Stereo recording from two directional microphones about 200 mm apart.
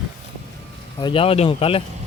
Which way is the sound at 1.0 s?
25° left (ahead or behind).